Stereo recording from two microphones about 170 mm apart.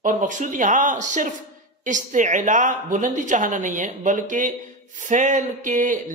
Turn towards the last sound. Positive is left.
turn(degrees=-50)  # may be behind; listen again after turning